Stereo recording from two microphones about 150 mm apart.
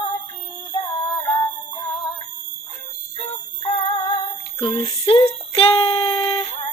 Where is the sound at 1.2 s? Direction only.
30° left (ahead or behind).